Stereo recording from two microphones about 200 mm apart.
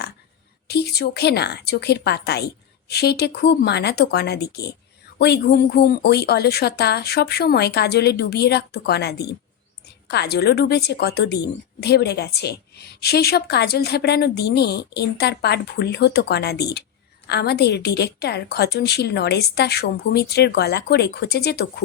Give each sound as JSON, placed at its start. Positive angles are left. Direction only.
{"t": 0.7, "sound": "a woman's voice", "side_deg": 55}